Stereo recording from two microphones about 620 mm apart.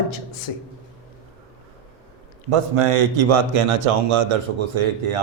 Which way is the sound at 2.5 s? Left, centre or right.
Right.